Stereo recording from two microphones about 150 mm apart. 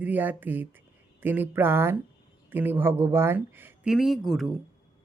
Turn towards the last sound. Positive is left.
turn(degrees=0)  # may be behind; listen again after turning